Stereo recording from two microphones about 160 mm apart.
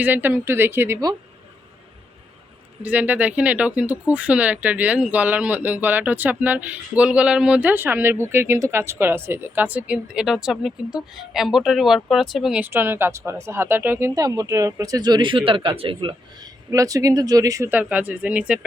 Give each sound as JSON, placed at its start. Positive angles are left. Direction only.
{"t": 0.0, "sound": "speech", "side_deg": -10}
{"t": 2.8, "sound": "speech", "side_deg": -10}
{"t": 16.7, "sound": "speech", "side_deg": -20}